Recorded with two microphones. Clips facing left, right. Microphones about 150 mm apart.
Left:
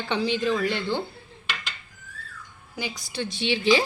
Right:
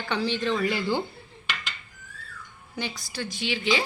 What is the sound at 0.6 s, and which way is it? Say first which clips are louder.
Speech: even; 5° right (ahead or behind).